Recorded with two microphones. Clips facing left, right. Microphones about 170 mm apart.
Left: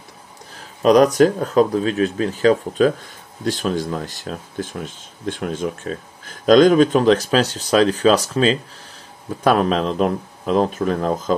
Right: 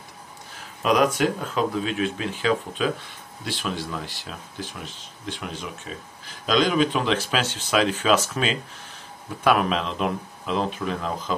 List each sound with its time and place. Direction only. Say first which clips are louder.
0.8 s speech: left 8 dB; 40° left (ahead or behind)